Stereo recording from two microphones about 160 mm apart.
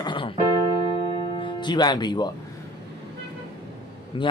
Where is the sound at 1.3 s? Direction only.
30° left (ahead or behind).